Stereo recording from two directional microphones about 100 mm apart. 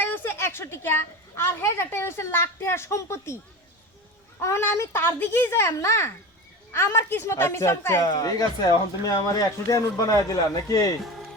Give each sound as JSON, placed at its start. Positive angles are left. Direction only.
{"t": 0.0, "sound": "a sound", "side_deg": 20}
{"t": 1.5, "sound": "a woman's voice", "side_deg": 25}
{"t": 4.4, "sound": "a woman's voice", "side_deg": 25}
{"t": 8.0, "sound": "speech", "side_deg": 40}